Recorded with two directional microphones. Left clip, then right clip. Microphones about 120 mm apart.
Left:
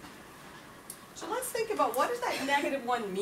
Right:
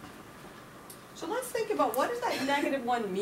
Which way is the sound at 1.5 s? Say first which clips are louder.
Even; 5° left (ahead or behind).